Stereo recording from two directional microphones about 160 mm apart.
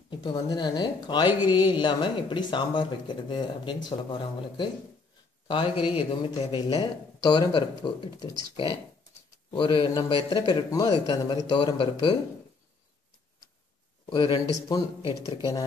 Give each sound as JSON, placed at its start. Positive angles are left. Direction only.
{"t": 0.1, "sound": "a man's voice", "side_deg": 30}
{"t": 14.0, "sound": "speech", "side_deg": 30}